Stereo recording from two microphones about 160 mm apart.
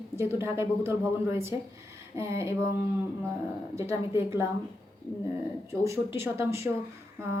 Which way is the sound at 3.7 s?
15° right (ahead or behind).